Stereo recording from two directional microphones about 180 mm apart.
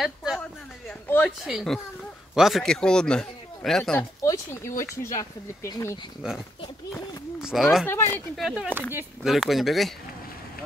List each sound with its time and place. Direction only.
0.0 s a sound: centre (ahead or behind)
1.4 s speech: centre (ahead or behind)
4.2 s speech: 15° left (ahead or behind)
7.3 s a sound: 5° right (ahead or behind)
7.8 s speech: 10° left (ahead or behind)
8.1 s speech: centre (ahead or behind)